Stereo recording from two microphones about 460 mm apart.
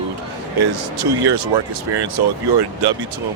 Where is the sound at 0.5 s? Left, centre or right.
Right.